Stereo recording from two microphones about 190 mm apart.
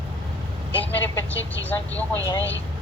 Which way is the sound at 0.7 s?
10° left (ahead or behind).